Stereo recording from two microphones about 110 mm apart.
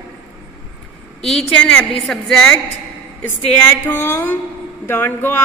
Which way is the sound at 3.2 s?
20° left (ahead or behind).